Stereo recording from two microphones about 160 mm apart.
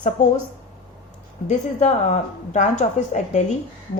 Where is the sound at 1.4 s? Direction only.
45° left (ahead or behind).